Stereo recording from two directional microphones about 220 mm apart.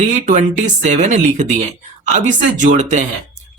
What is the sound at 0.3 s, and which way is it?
Speech, 35° right (ahead or behind).